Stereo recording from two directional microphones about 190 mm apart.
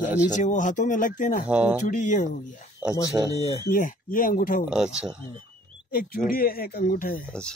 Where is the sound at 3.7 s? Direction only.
45° left (ahead or behind).